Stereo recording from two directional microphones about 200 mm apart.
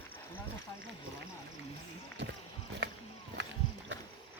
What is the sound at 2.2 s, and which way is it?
Speech, 60° right (ahead or behind).